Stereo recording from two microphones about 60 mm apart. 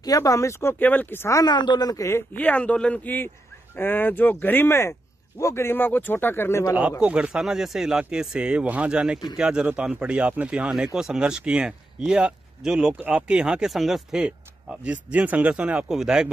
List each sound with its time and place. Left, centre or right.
0.0 s speech: left
0.7 s speech: left
1.3 s speech: left
2.3 s speech: left
6.7 s speech: centre
7.2 s speech: centre
10.6 s speech: centre
13.7 s speech: centre
14.9 s speech: right
15.9 s speech: centre